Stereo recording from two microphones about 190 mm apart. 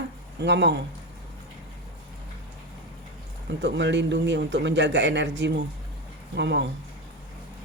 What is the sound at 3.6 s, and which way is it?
Speech, 65° right (ahead or behind).